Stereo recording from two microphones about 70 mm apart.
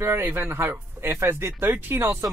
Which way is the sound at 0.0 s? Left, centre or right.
Right.